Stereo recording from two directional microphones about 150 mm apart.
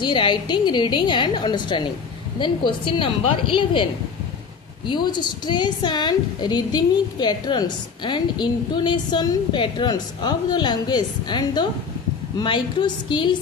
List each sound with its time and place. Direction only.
0.0 s a woman's voice: 30° left (ahead or behind)